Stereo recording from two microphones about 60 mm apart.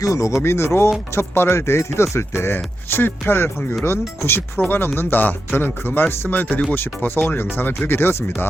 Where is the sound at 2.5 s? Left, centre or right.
Left.